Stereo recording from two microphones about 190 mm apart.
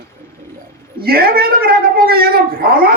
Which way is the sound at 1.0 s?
55° right (ahead or behind).